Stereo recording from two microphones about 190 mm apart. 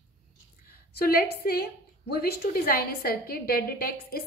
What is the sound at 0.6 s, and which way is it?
A woman's voice, 55° left (ahead or behind).